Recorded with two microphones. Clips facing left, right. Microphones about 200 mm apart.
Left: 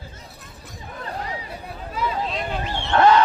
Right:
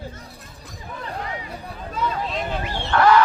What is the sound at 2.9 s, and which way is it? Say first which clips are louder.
Music: left 1 dB; 25° left (ahead or behind).